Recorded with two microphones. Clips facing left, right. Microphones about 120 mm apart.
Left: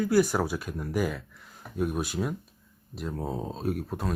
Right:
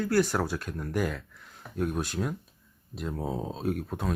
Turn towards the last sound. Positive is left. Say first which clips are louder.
# even
turn(degrees=0)  # may be behind; listen again after turning